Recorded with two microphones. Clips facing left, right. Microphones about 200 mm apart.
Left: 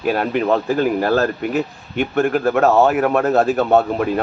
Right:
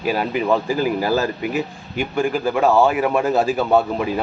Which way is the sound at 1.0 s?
60° left (ahead or behind).